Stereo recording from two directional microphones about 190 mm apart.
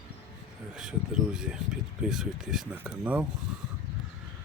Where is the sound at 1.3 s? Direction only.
5° right (ahead or behind).